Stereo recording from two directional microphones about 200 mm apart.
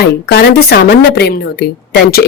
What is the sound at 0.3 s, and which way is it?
A woman's voice, 55° left (ahead or behind).